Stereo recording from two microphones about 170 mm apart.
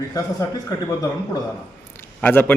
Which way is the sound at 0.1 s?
20° left (ahead or behind).